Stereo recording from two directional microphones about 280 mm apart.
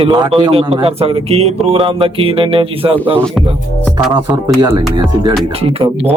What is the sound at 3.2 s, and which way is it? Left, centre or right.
Music, centre.